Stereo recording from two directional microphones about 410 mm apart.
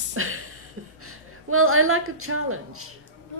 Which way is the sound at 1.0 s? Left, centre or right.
Right.